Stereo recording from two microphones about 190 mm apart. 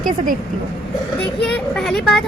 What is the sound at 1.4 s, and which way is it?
Speech, centre (ahead or behind).